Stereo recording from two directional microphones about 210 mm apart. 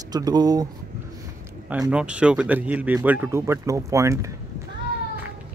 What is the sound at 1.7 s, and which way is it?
Speech, 5° right (ahead or behind).